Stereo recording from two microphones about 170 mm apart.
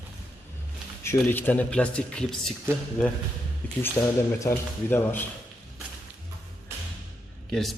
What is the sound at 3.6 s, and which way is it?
Speech, 10° left (ahead or behind).